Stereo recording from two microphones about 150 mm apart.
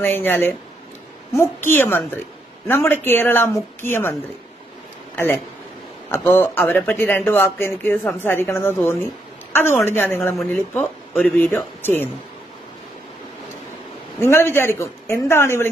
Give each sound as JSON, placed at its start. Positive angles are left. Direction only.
{"t": 0.0, "sound": "speech", "side_deg": 15}
{"t": 5.1, "sound": "a woman's voice", "side_deg": 15}
{"t": 14.2, "sound": "speech", "side_deg": 15}